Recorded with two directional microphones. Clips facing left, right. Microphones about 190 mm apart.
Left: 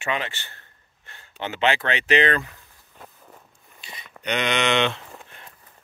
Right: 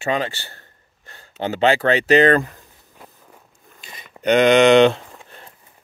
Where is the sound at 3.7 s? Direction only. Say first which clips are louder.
Right 1 dB; 45° right (ahead or behind).